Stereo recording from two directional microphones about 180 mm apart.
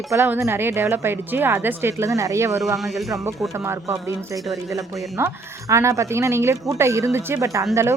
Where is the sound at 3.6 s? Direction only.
15° right (ahead or behind).